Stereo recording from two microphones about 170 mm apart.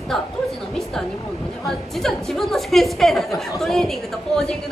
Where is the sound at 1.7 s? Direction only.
Centre (ahead or behind).